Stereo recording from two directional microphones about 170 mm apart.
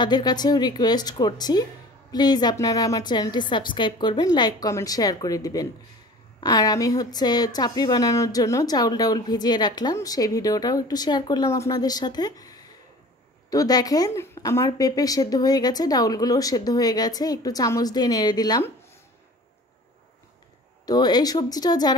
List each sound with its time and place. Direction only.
0.0 s a woman's voice: 25° left (ahead or behind)
20.8 s a woman's voice: 25° left (ahead or behind)